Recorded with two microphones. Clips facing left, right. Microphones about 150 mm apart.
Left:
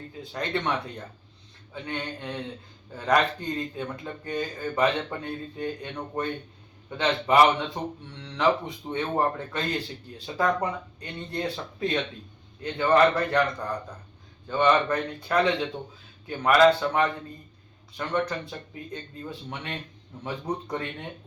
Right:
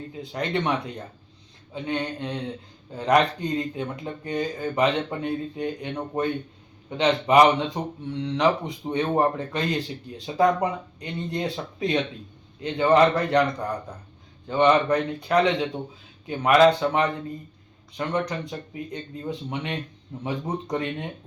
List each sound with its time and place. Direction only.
0.3 s speech: 15° right (ahead or behind)
1.7 s speech: 15° right (ahead or behind)
14.4 s speech: 15° right (ahead or behind)